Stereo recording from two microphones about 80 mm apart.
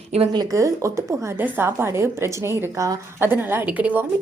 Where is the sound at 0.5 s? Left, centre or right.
Right.